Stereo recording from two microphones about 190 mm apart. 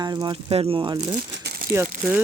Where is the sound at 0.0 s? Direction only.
20° right (ahead or behind).